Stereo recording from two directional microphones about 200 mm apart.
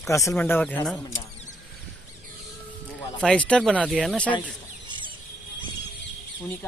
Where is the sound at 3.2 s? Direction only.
5° left (ahead or behind).